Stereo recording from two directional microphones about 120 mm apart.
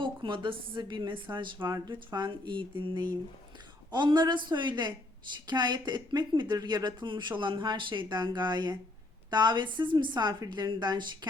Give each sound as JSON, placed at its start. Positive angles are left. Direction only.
{"t": 0.0, "sound": "speech", "side_deg": -40}